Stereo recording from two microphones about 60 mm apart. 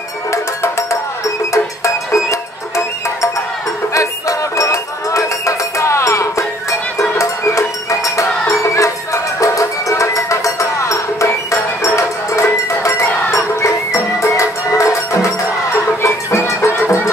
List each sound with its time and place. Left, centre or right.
0.3 s music: left
3.9 s music: left